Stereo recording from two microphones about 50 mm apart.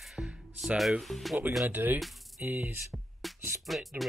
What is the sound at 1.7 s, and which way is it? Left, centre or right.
Speech, right.